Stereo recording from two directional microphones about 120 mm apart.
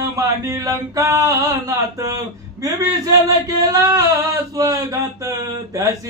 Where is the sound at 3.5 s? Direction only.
30° right (ahead or behind).